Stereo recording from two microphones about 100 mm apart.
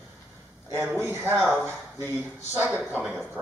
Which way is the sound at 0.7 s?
25° right (ahead or behind).